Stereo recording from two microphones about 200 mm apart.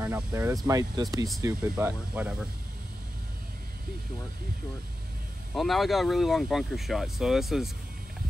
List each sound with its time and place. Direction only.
0.3 s speech: 15° right (ahead or behind)
5.5 s speech: centre (ahead or behind)